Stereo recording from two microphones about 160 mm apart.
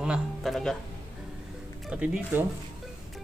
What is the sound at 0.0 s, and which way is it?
Speech, 5° right (ahead or behind).